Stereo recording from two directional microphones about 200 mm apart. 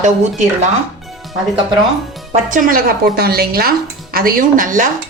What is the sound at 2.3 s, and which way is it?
A woman's voice, 40° right (ahead or behind).